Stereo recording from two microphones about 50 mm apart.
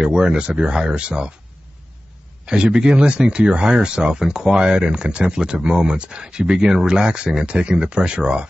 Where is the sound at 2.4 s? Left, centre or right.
Centre.